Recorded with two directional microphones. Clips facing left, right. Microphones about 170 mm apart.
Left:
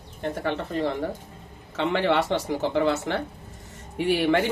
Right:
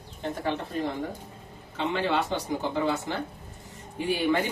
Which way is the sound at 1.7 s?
85° left.